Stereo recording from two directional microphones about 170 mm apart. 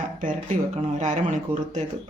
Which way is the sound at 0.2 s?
45° right (ahead or behind).